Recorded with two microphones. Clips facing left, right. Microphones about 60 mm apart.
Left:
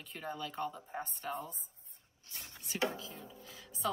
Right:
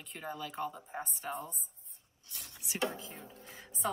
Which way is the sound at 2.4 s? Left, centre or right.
Centre.